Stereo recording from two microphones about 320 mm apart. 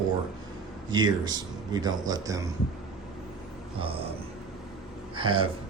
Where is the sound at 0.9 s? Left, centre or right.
Centre.